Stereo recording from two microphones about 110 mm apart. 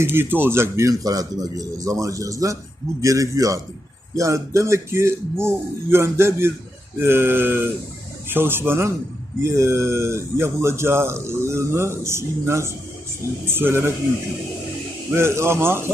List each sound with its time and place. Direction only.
0.0 s speech: 20° right (ahead or behind)
15.1 s speech: 25° right (ahead or behind)